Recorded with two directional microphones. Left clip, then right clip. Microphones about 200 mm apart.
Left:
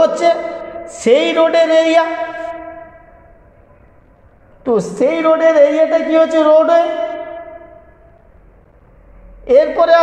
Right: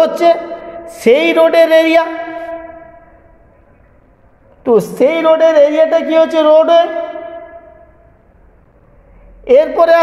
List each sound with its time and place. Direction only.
0.0 s a woman's voice: 30° right (ahead or behind)
4.6 s a woman's voice: 40° right (ahead or behind)
9.4 s a woman's voice: 35° right (ahead or behind)